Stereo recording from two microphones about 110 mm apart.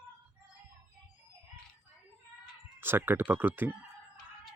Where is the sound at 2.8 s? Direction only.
20° right (ahead or behind).